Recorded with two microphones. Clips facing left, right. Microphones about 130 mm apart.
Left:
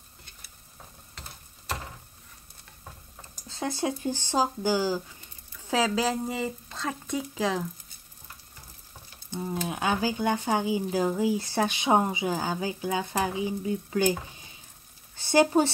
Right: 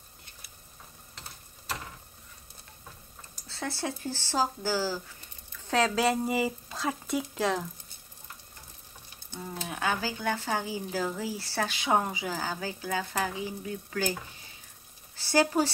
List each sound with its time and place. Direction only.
3.4 s speech: 15° left (ahead or behind)
5.7 s speech: centre (ahead or behind)
9.7 s speech: 15° left (ahead or behind)
15.1 s speech: 20° left (ahead or behind)